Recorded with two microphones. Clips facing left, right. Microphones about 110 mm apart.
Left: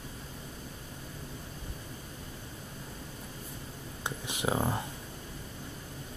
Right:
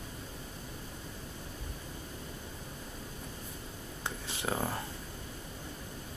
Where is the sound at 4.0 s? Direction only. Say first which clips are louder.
Left 3 dB; 15° left (ahead or behind).